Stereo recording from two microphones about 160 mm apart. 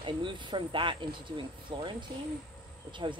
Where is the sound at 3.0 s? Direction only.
30° right (ahead or behind).